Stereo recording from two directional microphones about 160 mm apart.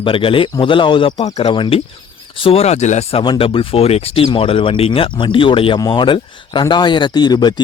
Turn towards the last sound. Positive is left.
turn(degrees=25)  # may be behind; listen again after turning